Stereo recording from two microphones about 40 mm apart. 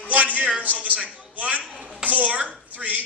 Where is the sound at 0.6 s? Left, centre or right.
Right.